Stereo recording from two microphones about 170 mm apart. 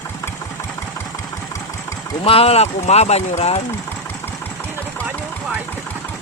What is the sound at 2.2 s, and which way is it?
Speech, 35° left (ahead or behind).